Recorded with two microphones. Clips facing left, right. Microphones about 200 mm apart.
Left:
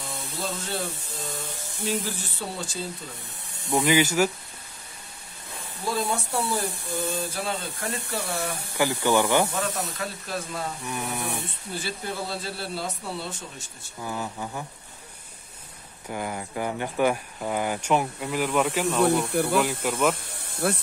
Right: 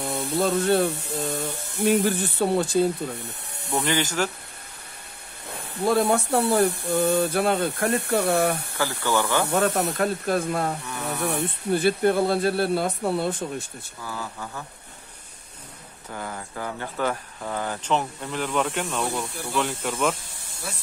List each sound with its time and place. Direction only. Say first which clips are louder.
0.0 s speech: right 10 dB; 60° right (ahead or behind)
3.7 s speech: left 3 dB; 10° left (ahead or behind)
5.5 s speech: right 8 dB; 60° right (ahead or behind)
9.0 s speech: left 2 dB; 15° left (ahead or behind)
9.5 s speech: right 8 dB; 60° right (ahead or behind)
14.0 s speech: left 3 dB; 20° left (ahead or behind)
16.1 s speech: left 3 dB; 15° left (ahead or behind)
19.3 s speech: left 11 dB; 60° left (ahead or behind)
19.8 s speech: left 1 dB; centre (ahead or behind)
20.6 s speech: left 11 dB; 60° left (ahead or behind)